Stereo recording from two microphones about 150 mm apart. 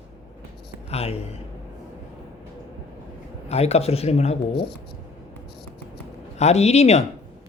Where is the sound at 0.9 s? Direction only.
45° left (ahead or behind).